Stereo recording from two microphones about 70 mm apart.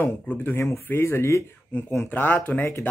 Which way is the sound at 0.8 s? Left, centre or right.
Left.